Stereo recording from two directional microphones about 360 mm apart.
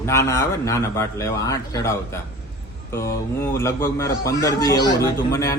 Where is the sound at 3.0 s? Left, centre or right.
Centre.